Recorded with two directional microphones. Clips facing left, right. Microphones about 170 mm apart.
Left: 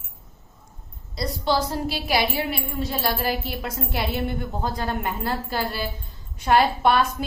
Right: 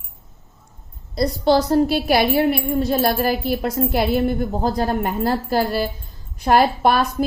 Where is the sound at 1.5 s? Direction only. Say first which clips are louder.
Right 8 dB; 45° right (ahead or behind).